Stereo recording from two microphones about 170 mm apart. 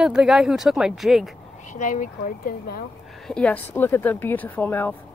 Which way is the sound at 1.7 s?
50° left (ahead or behind).